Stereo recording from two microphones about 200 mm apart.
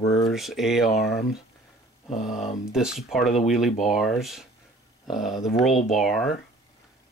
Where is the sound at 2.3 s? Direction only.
35° left (ahead or behind).